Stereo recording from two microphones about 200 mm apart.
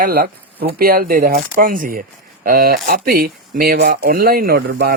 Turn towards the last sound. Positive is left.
turn(degrees=-55)  # may be behind; listen again after turning